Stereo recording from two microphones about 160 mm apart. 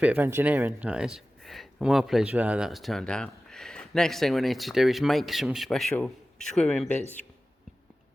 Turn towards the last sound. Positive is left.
turn(degrees=0)  # may be behind; listen again after turning